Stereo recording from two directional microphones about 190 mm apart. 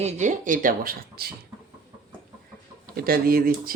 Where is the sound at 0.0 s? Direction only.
40° right (ahead or behind).